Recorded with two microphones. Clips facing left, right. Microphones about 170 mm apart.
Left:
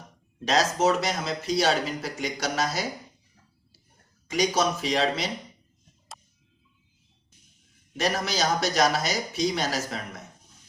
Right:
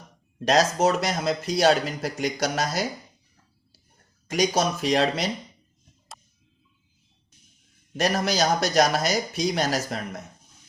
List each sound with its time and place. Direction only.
0.3 s speech: 45° right (ahead or behind)
4.3 s speech: 45° right (ahead or behind)
6.1 s tick-tock: centre (ahead or behind)
8.0 s speech: 40° right (ahead or behind)